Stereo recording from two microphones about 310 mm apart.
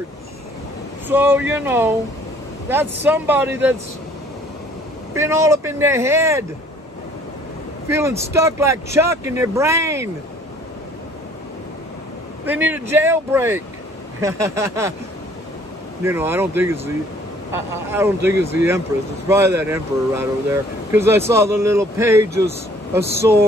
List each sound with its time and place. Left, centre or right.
1.0 s speech: centre
5.1 s speech: centre
7.9 s speech: centre
12.4 s speech: centre
16.0 s speech: centre